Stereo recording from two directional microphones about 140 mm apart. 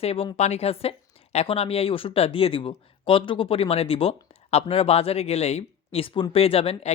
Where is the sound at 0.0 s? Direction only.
45° left (ahead or behind).